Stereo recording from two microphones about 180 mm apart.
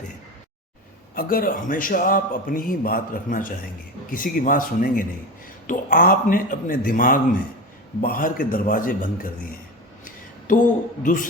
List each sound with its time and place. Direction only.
1.1 s a man's voice: 55° left (ahead or behind)
10.0 s a sound: 50° left (ahead or behind)
11.0 s a man's voice: 50° left (ahead or behind)